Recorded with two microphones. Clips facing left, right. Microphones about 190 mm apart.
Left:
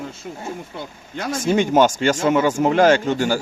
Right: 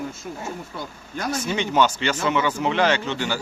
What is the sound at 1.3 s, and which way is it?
Speech, 50° left (ahead or behind).